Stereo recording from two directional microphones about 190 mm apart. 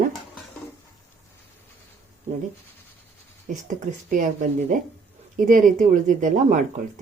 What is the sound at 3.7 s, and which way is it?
Speech, 45° right (ahead or behind).